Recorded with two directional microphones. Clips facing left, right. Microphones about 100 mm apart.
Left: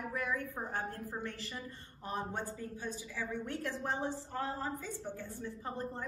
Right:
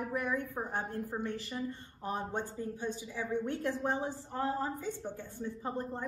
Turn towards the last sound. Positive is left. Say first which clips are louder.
# right 3 dB
turn(degrees=-20)  # may be behind; listen again after turning